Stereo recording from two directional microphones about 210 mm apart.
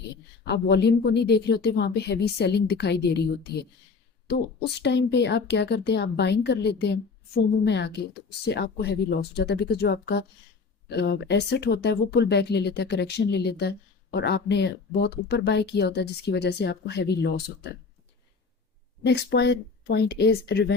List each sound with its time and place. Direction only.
0.4 s a woman's voice: 55° left (ahead or behind)
19.0 s speech: 55° left (ahead or behind)